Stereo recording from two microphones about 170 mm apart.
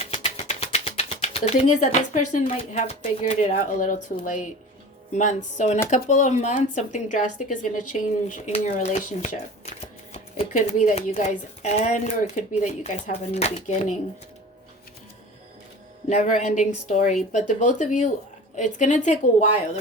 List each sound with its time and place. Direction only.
0.0 s speech: 35° left (ahead or behind)
16.0 s speech: 45° left (ahead or behind)